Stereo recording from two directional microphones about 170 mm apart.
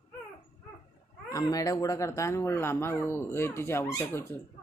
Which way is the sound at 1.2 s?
20° left (ahead or behind).